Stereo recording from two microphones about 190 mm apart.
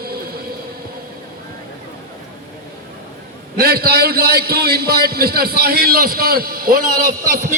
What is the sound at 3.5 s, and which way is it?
A man's voice, 55° right (ahead or behind).